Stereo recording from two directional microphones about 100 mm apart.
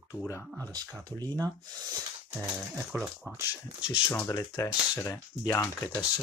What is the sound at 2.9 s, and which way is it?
Speech, 5° right (ahead or behind).